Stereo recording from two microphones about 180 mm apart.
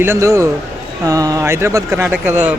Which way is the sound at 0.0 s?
15° right (ahead or behind).